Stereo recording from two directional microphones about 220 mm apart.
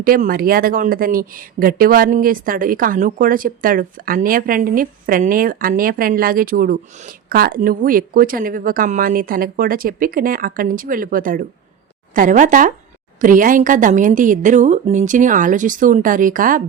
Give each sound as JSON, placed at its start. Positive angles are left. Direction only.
{"t": 0.0, "sound": "speech", "side_deg": -40}